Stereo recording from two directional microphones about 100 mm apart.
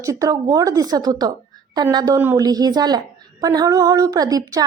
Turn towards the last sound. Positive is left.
turn(degrees=-40)  # may be behind; listen again after turning